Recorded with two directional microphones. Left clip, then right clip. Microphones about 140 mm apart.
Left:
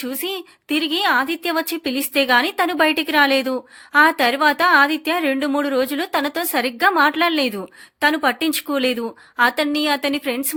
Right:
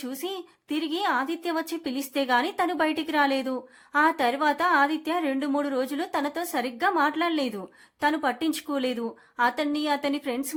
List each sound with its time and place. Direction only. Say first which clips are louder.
0.0 s a woman's voice: left 7 dB; 25° left (ahead or behind)